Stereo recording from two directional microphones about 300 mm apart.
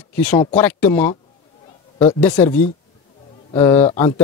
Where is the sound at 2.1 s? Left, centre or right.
Centre.